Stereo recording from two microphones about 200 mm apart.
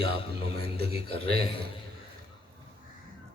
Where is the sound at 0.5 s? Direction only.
55° right (ahead or behind).